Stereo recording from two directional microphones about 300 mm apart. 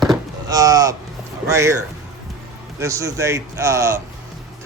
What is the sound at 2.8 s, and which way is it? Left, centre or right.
A man's voice, centre.